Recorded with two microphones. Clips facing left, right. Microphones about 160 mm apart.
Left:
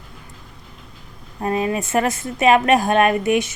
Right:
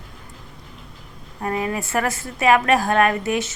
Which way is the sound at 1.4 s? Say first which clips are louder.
Left 3 dB; 25° left (ahead or behind).